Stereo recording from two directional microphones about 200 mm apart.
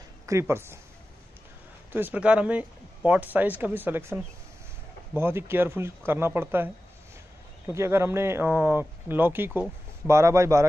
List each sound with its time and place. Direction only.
0.3 s speech: 15° right (ahead or behind)
1.9 s speech: 10° right (ahead or behind)